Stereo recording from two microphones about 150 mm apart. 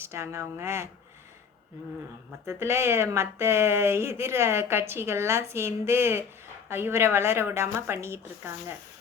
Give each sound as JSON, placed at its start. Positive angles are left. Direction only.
{"t": 0.0, "sound": "speech", "side_deg": -15}
{"t": 2.5, "sound": "speech", "side_deg": -15}